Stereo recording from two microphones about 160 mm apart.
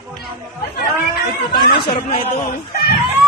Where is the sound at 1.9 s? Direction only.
35° left (ahead or behind).